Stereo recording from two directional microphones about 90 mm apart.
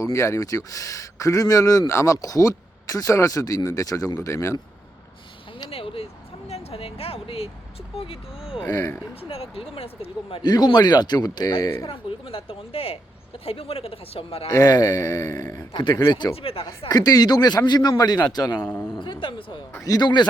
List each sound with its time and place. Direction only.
0.0 s speech: 35° left (ahead or behind)
5.7 s a sound: 90° left
7.9 s a woman's voice: 90° left
8.3 s speech: 5° right (ahead or behind)
8.7 s speech: 35° left (ahead or behind)
9.3 s a woman's voice: 90° left
10.4 s a man's voice: 50° left (ahead or behind)
11.9 s a woman's voice: 90° left
14.4 s speech: 40° left (ahead or behind)
15.7 s speech: 55° left (ahead or behind)
16.3 s a woman's voice: 90° left
16.9 s a man's voice: 45° left (ahead or behind)
18.9 s speech: 60° left (ahead or behind)
19.8 s speech: 40° left (ahead or behind)